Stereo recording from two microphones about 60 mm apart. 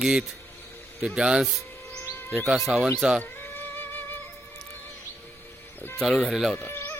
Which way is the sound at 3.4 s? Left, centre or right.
Left.